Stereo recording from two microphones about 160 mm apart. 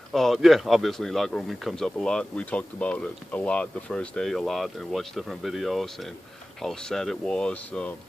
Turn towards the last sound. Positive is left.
turn(degrees=10)  # may be behind; listen again after turning